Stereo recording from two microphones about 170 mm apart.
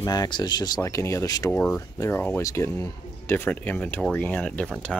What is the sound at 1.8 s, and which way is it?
Speech, 15° left (ahead or behind).